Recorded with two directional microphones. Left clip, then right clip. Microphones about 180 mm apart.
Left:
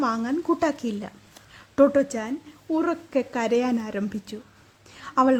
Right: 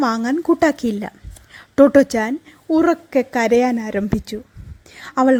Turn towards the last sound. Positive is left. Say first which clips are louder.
# right 4 dB
turn(degrees=-25)  # may be behind; listen again after turning